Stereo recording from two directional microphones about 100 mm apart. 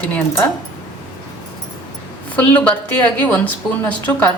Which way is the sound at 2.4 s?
15° left (ahead or behind).